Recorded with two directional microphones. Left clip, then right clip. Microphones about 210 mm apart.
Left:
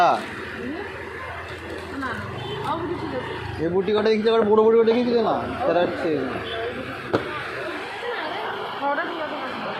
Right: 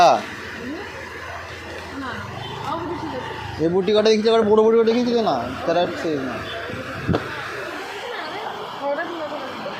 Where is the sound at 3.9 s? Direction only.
55° right (ahead or behind).